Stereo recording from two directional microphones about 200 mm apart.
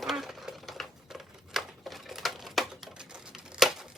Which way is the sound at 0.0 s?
Centre (ahead or behind).